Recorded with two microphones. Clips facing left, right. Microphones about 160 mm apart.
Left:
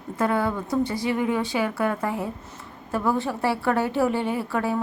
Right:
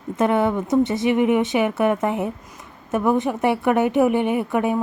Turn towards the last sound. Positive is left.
turn(degrees=-20)  # may be behind; listen again after turning